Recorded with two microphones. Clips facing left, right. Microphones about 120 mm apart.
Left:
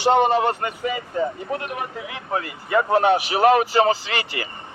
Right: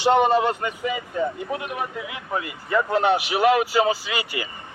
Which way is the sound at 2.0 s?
40° left (ahead or behind).